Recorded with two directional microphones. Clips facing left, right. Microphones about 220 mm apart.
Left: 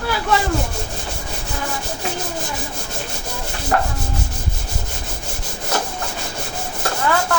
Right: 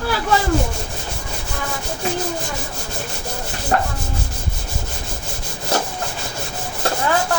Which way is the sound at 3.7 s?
30° right (ahead or behind).